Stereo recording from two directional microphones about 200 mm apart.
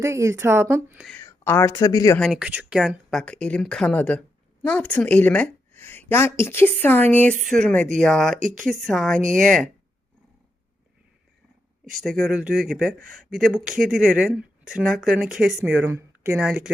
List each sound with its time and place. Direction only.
0.0 s speech: 15° right (ahead or behind)
1.2 s speech: 15° left (ahead or behind)
2.1 s a woman's voice: centre (ahead or behind)
8.4 s speech: 40° right (ahead or behind)
8.9 s speech: centre (ahead or behind)
9.1 s speech: 40° right (ahead or behind)
11.9 s speech: centre (ahead or behind)